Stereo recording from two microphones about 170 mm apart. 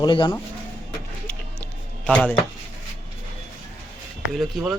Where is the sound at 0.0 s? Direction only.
25° left (ahead or behind).